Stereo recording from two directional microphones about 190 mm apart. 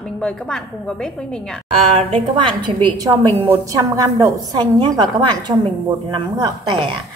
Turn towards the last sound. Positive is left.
turn(degrees=-25)  # may be behind; listen again after turning